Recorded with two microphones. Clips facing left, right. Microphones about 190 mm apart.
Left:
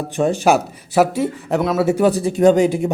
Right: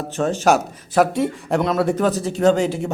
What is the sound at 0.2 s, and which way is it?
A man's voice, 10° left (ahead or behind).